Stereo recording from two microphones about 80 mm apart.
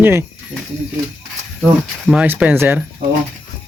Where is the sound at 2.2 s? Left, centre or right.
Right.